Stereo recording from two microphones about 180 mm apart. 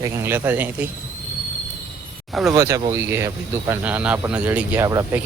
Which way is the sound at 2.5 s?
15° right (ahead or behind).